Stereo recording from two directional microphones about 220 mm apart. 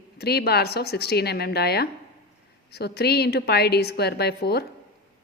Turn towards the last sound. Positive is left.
turn(degrees=45)  # may be behind; listen again after turning